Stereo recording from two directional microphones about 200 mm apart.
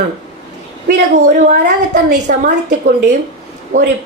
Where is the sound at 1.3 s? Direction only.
40° right (ahead or behind).